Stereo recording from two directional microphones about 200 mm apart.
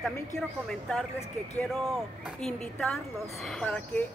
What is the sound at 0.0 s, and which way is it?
Speech, 5° left (ahead or behind).